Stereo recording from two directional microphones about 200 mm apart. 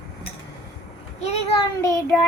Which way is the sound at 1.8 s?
15° left (ahead or behind).